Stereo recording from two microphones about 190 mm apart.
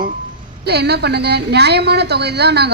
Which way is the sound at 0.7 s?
60° right (ahead or behind).